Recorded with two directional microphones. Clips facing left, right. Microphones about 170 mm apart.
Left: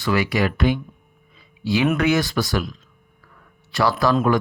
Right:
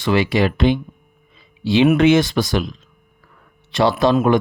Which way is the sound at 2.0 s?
20° right (ahead or behind).